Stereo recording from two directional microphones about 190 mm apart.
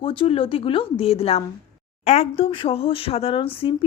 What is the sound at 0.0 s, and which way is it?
Speech, 30° left (ahead or behind).